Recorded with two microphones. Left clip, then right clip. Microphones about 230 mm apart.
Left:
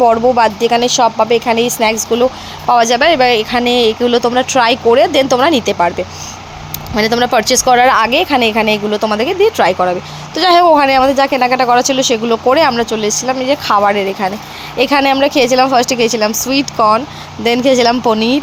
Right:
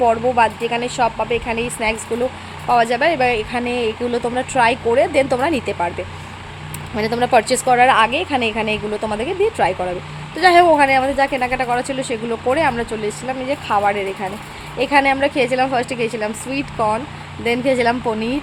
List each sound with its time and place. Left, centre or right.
0.0 s speech: centre
6.9 s speech: centre